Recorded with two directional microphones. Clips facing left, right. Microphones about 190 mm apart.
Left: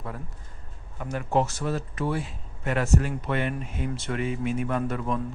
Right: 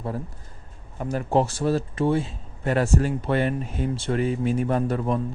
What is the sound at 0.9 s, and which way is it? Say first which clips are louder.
Speech: right 3 dB; 35° right (ahead or behind).